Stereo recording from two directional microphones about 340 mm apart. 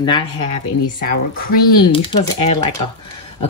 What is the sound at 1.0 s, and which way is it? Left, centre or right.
Speech, left.